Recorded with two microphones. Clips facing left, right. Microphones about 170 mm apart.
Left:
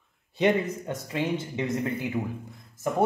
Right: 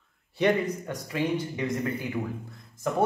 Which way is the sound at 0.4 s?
20° left (ahead or behind).